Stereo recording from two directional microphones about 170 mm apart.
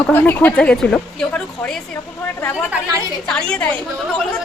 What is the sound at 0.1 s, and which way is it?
A woman's voice, 10° left (ahead or behind).